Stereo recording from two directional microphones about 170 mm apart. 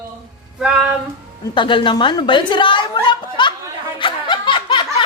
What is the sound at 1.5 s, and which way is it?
Speech, 30° left (ahead or behind).